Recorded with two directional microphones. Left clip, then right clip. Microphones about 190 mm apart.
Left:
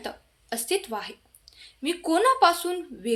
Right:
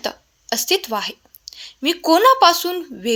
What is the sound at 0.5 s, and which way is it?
A woman's voice, 40° right (ahead or behind).